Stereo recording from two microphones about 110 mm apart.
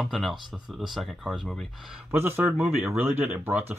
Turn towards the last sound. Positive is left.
turn(degrees=-20)  # may be behind; listen again after turning